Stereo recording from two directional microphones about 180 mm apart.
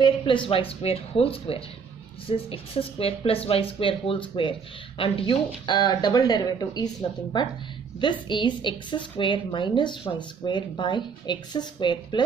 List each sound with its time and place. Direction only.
0.0 s speech: 25° left (ahead or behind)